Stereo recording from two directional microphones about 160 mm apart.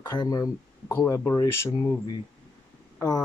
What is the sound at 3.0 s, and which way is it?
Speech, 20° left (ahead or behind).